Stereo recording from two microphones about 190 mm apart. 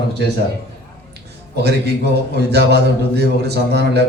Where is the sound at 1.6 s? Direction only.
60° right (ahead or behind).